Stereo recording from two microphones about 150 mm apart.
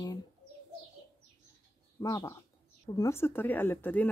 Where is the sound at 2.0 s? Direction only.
25° left (ahead or behind).